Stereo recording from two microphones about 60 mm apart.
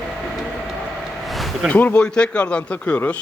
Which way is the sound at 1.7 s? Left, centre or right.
Left.